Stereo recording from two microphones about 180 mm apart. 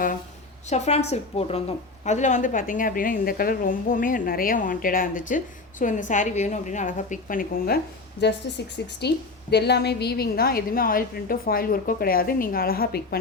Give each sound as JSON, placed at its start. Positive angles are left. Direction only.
{"t": 0.7, "sound": "a woman's voice", "side_deg": 40}
{"t": 8.2, "sound": "a woman's voice", "side_deg": 70}